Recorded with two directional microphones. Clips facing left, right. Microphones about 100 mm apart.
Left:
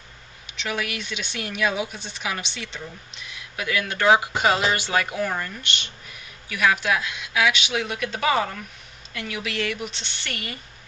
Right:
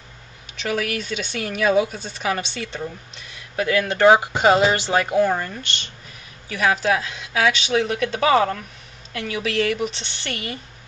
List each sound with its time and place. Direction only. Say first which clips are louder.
0.6 s speech: right 5 dB; 45° right (ahead or behind)